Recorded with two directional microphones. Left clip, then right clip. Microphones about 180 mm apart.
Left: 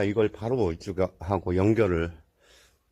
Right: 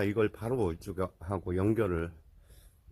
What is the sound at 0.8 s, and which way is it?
Speech, 5° left (ahead or behind).